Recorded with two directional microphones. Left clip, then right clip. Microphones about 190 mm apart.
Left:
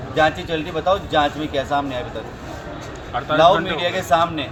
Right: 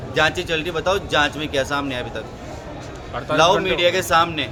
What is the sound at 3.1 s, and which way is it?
Speech, 15° right (ahead or behind).